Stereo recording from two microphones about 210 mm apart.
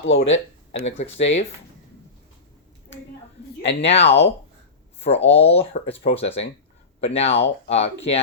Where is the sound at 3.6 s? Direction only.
55° left (ahead or behind).